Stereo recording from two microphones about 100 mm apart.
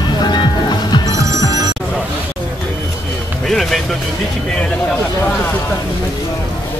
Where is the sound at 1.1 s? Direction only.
30° right (ahead or behind).